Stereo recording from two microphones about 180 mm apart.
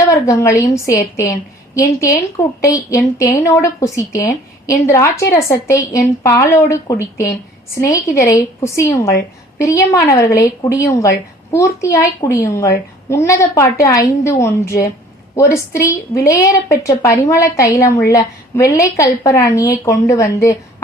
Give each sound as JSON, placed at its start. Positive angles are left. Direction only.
{"t": 0.0, "sound": "a woman's voice", "side_deg": 15}